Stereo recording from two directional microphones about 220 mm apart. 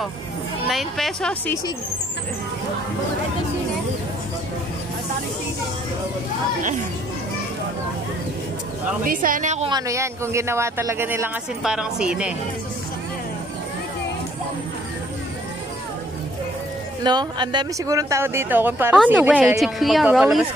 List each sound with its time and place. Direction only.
0.7 s a woman's voice: centre (ahead or behind)
9.0 s a woman's voice: 40° right (ahead or behind)
9.7 s speech: 15° right (ahead or behind)
17.0 s a woman's voice: 20° right (ahead or behind); by 20.4 s centre (ahead or behind)